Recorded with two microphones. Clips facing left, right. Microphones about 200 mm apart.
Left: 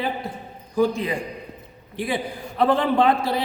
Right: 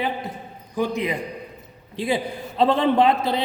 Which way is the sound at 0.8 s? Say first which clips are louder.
Left 2 dB; 20° right (ahead or behind).